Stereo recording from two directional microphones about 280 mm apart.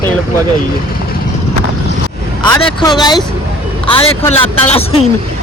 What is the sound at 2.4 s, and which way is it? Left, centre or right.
A man's voice, centre.